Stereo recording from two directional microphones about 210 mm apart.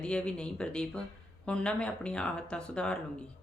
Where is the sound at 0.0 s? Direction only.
5° left (ahead or behind).